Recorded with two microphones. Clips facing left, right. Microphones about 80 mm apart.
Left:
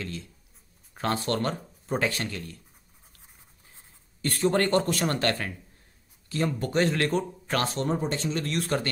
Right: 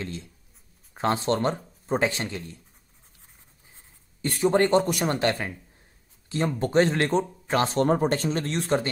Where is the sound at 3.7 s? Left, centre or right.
Centre.